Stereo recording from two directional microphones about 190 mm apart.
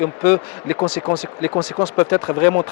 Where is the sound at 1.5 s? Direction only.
25° left (ahead or behind).